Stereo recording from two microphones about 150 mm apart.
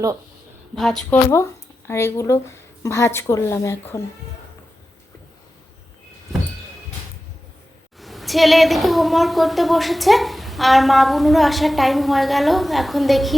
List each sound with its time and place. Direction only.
0.8 s speech: centre (ahead or behind)
1.1 s a woman's voice: 20° left (ahead or behind)
7.9 s speech: centre (ahead or behind)